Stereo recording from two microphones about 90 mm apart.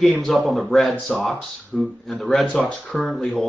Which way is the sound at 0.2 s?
Centre (ahead or behind).